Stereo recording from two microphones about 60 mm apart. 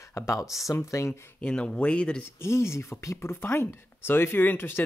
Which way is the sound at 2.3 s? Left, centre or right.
Left.